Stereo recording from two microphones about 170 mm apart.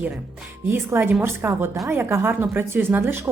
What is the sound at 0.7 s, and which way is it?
Speech, 15° right (ahead or behind).